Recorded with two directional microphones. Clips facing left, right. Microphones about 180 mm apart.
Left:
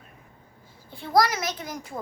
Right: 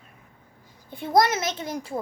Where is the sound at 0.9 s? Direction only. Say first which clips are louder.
Right 2 dB; 20° right (ahead or behind).